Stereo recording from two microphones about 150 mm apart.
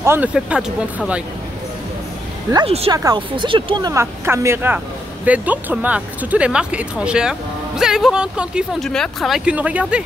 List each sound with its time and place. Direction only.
0.0 s speech: 15° right (ahead or behind)
2.5 s speech: 40° right (ahead or behind)
2.9 s speech: 25° right (ahead or behind); by 10.0 s 10° right (ahead or behind)